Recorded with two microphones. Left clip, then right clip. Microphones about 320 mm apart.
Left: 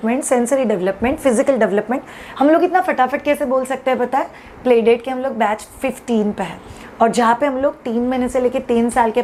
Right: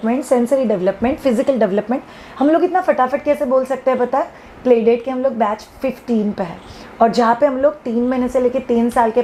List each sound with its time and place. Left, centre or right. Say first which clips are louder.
0.0 s speech: right 1 dB; left
7.0 s a woman's voice: right 1 dB; centre